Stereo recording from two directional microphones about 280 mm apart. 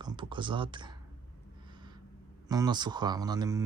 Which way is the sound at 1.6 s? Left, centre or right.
Centre.